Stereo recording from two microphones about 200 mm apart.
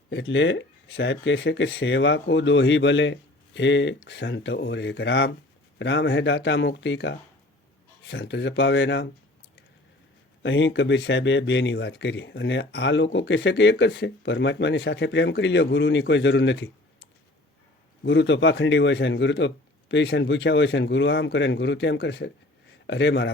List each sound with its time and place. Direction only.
0.1 s speech: 65° left (ahead or behind)
10.4 s speech: 65° left (ahead or behind)
18.0 s a man's voice: 65° left (ahead or behind)